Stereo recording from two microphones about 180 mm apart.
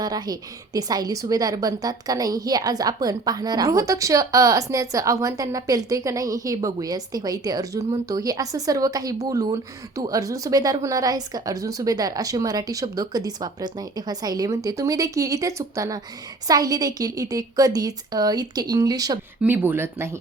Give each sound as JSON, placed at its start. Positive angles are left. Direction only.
{"t": 0.0, "sound": "a woman's voice", "side_deg": -20}